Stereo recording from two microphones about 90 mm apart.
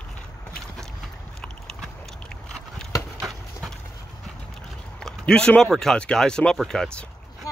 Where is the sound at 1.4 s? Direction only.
5° left (ahead or behind).